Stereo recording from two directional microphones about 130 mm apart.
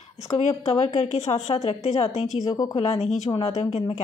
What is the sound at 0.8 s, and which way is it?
A woman's voice, 60° left (ahead or behind).